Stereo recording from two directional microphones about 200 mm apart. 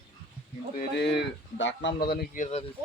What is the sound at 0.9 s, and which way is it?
Speech, 60° left (ahead or behind).